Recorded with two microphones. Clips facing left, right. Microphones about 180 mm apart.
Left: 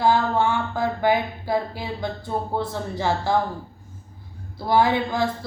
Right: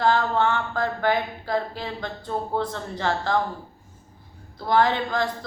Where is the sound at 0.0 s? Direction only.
10° left (ahead or behind).